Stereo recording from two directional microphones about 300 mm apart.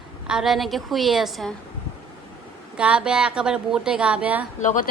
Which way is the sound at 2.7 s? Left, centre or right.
Centre.